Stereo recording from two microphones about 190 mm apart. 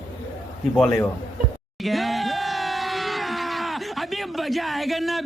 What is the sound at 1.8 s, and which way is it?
Crowd, centre (ahead or behind).